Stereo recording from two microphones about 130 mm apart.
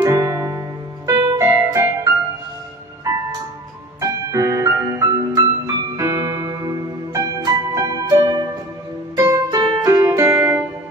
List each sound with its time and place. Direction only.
0.0 s piano: 25° right (ahead or behind)
1.4 s music: 20° right (ahead or behind)
3.1 s music: 25° right (ahead or behind)
10.3 s music: 10° right (ahead or behind)